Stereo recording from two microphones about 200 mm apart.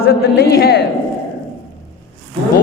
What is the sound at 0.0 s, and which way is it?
Speech, 50° left (ahead or behind).